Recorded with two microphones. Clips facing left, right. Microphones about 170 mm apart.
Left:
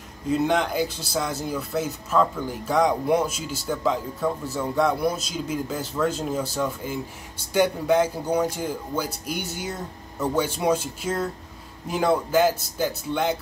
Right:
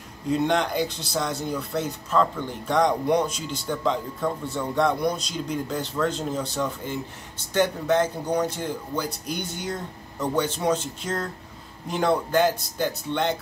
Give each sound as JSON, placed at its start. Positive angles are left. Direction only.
{"t": 0.3, "sound": "speech", "side_deg": 0}